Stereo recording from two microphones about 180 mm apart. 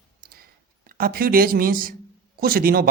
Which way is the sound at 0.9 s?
50° right (ahead or behind).